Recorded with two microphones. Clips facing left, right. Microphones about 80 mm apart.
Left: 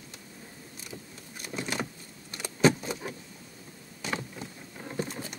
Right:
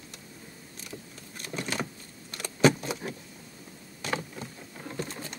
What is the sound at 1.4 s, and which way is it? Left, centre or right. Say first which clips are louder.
Vehicle: even; centre.